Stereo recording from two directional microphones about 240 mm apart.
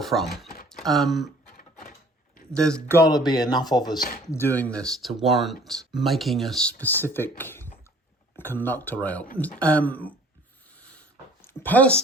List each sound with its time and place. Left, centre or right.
0.0 s speech: centre
2.5 s speech: centre
11.4 s speech: centre